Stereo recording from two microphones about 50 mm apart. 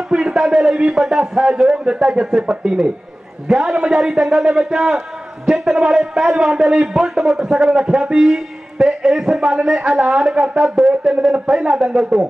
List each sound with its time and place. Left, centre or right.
0.1 s a man's voice: centre